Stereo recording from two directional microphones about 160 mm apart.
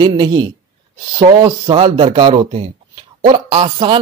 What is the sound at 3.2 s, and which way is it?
Speech, 30° right (ahead or behind).